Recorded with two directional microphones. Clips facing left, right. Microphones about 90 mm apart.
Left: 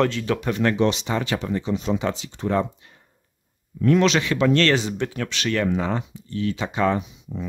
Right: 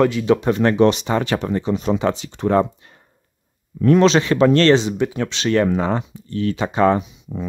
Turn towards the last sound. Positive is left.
turn(degrees=-45)  # may be behind; listen again after turning